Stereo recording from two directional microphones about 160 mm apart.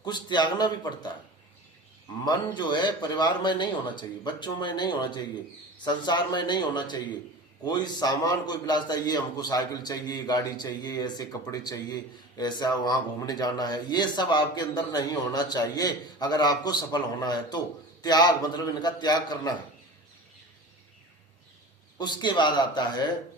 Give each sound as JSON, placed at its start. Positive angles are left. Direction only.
{"t": 0.0, "sound": "speech", "side_deg": 25}
{"t": 2.2, "sound": "speech", "side_deg": 25}
{"t": 21.9, "sound": "speech", "side_deg": 25}